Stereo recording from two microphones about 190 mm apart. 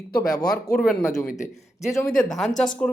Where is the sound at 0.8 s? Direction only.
5° left (ahead or behind).